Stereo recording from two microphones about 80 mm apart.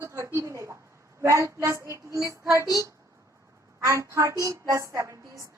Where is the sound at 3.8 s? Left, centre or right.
Right.